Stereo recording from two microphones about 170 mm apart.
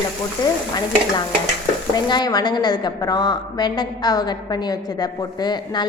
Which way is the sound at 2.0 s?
25° left (ahead or behind).